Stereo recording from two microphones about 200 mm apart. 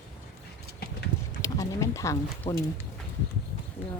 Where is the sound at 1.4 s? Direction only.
15° left (ahead or behind).